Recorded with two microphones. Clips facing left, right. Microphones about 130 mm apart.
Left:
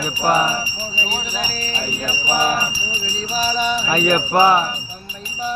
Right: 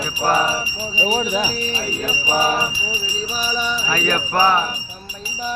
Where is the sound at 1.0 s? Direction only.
55° right (ahead or behind).